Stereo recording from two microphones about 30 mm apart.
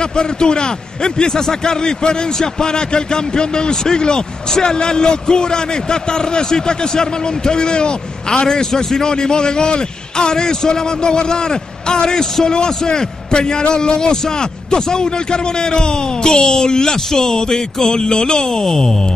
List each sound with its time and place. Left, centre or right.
0.2 s a man's voice: left
16.3 s a man's voice: centre